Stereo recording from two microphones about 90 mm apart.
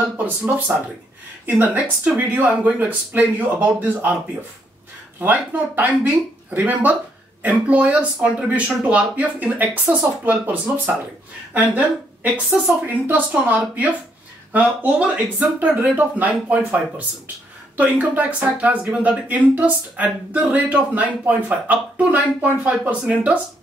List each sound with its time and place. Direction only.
1.4 s speech: 20° right (ahead or behind)
5.2 s speech: 20° right (ahead or behind)